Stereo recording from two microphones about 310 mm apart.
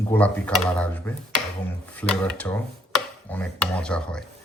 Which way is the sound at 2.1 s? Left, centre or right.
Centre.